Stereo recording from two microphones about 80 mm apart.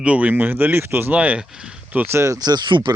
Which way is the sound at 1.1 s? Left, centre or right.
Centre.